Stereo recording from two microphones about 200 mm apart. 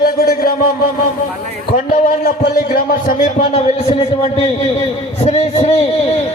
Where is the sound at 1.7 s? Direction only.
45° left (ahead or behind).